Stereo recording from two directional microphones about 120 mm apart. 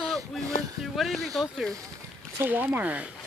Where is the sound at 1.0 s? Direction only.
Centre (ahead or behind).